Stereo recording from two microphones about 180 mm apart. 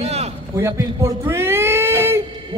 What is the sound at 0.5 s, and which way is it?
A man's voice, 15° right (ahead or behind).